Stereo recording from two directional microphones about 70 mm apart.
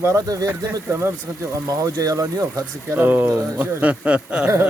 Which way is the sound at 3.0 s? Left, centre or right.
Right.